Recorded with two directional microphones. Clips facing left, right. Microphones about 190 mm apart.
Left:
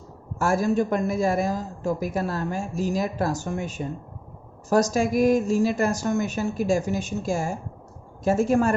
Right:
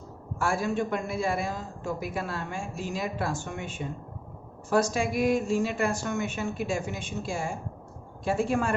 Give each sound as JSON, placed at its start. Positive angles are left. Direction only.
{"t": 0.3, "sound": "a man's voice", "side_deg": 40}